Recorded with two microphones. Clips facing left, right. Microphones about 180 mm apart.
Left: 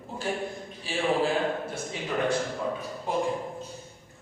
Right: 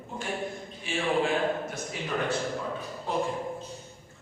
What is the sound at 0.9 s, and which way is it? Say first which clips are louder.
Speech: left 1 dB; 35° left (ahead or behind).